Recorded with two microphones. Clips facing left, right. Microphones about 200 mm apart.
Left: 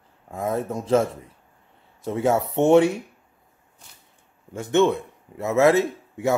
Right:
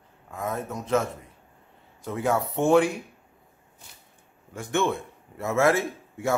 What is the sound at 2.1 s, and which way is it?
Speech, 25° left (ahead or behind).